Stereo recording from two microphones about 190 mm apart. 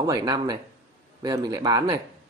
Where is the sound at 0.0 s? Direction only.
20° right (ahead or behind).